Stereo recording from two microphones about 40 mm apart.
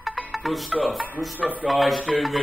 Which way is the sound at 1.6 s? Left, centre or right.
Centre.